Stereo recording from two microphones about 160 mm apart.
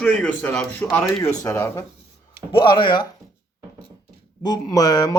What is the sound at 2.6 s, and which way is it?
Speech, 30° left (ahead or behind).